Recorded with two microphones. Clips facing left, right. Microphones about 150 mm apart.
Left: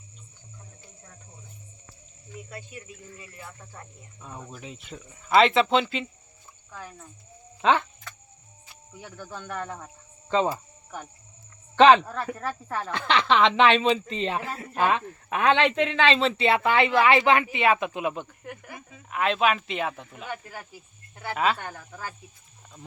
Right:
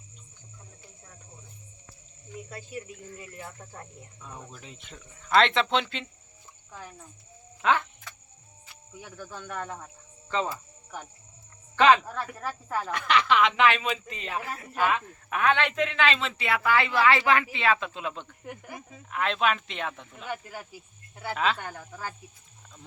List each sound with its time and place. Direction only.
2.5 s speech: 35° right (ahead or behind)
4.5 s speech: 5° left (ahead or behind)
7.6 s speech: 20° left (ahead or behind)
9.0 s speech: 5° right (ahead or behind)
10.2 s speech: 25° left (ahead or behind)
12.4 s speech: 5° right (ahead or behind)
12.9 s speech: 30° left (ahead or behind); by 18.3 s 10° left (ahead or behind)
18.4 s speech: 15° right (ahead or behind)
19.1 s speech: 5° left (ahead or behind)
21.3 s speech: 5° left (ahead or behind)